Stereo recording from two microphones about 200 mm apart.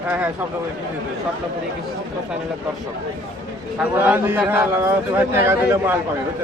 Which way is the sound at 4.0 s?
10° right (ahead or behind).